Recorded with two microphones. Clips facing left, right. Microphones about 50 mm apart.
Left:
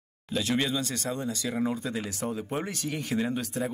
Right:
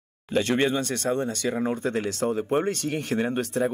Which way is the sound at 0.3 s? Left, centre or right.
Right.